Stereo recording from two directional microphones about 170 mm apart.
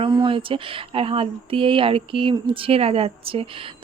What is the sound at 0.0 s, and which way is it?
Speech, 30° right (ahead or behind).